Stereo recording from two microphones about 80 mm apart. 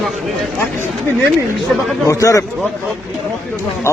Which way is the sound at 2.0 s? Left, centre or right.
Left.